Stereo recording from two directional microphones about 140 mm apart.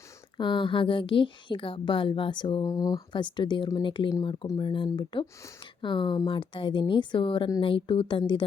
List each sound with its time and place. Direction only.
0.3 s a woman's voice: 35° left (ahead or behind)